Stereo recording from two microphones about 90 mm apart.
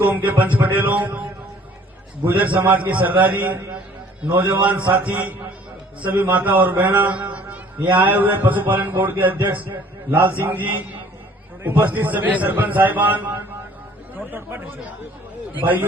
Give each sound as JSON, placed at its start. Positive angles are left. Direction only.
{"t": 0.0, "sound": "a man's voice", "side_deg": -20}
{"t": 2.2, "sound": "a man's voice", "side_deg": -20}